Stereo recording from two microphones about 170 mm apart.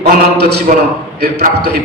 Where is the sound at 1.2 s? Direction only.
65° right (ahead or behind).